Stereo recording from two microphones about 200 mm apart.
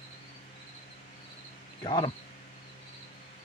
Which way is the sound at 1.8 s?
25° left (ahead or behind).